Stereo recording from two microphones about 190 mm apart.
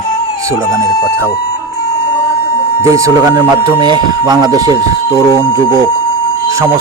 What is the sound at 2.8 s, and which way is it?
Speech, 15° right (ahead or behind).